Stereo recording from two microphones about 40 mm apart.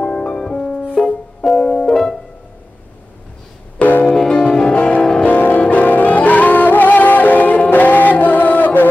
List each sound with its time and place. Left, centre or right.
0.0 s music: left
3.8 s music: left
4.1 s music: centre
5.2 s music: left